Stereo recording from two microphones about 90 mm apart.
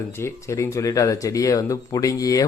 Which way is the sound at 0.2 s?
30° left (ahead or behind).